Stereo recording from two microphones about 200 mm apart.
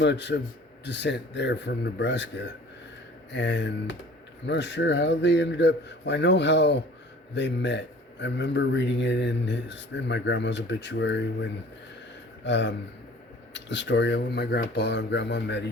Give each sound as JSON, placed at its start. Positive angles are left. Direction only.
{"t": 0.0, "sound": "speech", "side_deg": 60}
{"t": 12.5, "sound": "speech", "side_deg": 60}